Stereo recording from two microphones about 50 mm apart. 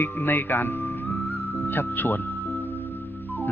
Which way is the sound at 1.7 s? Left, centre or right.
Left.